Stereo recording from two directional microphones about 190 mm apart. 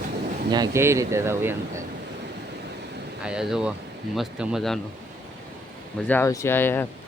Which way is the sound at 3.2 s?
5° right (ahead or behind).